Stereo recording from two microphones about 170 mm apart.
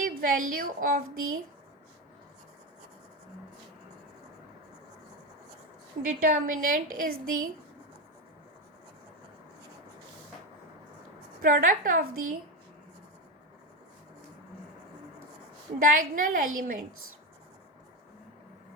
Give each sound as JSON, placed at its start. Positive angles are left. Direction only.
{"t": 0.0, "sound": "a woman's voice", "side_deg": -55}
{"t": 6.1, "sound": "a woman's voice", "side_deg": -50}
{"t": 11.4, "sound": "a woman's voice", "side_deg": -55}
{"t": 15.8, "sound": "a woman's voice", "side_deg": -55}